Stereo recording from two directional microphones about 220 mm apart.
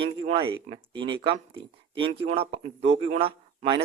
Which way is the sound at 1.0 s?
55° right (ahead or behind).